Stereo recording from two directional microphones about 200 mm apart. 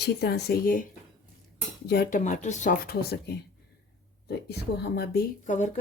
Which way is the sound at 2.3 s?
35° left (ahead or behind).